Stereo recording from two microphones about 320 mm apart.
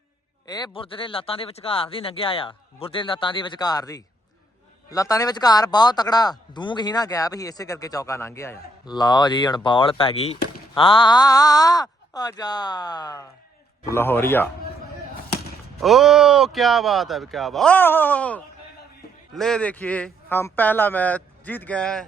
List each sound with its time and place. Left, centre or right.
0.4 s speech: centre
15.8 s speech: centre